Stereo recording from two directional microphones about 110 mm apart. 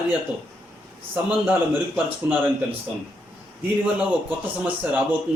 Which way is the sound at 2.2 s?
20° right (ahead or behind).